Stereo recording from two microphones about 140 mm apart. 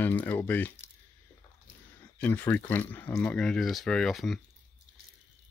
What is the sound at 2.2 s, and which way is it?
Speech, 15° left (ahead or behind).